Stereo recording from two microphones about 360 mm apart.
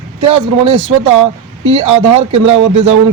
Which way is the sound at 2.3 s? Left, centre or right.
Centre.